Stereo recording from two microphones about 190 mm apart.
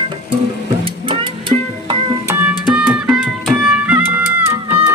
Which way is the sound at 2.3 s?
5° right (ahead or behind).